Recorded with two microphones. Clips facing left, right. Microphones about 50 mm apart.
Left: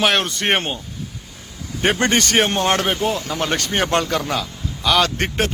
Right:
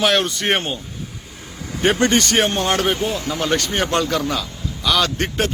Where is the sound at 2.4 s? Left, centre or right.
Left.